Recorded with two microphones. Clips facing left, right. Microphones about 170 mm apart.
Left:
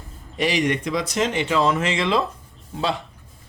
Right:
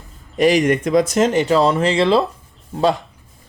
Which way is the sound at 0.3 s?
45° right (ahead or behind).